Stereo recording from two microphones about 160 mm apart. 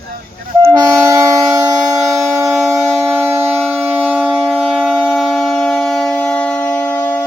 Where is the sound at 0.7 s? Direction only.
20° right (ahead or behind).